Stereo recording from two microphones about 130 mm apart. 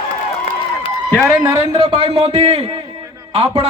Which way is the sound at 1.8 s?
50° right (ahead or behind).